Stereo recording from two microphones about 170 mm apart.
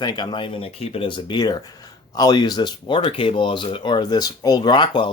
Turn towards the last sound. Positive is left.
turn(degrees=25)  # may be behind; listen again after turning